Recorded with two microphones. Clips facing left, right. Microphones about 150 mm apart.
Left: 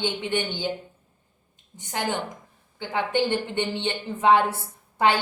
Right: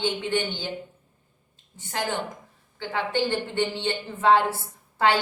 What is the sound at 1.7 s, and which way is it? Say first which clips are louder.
A woman's voice: left 1 dB; 20° left (ahead or behind).